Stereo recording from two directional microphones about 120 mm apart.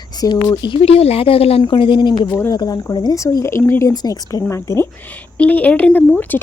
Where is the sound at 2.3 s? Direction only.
20° left (ahead or behind).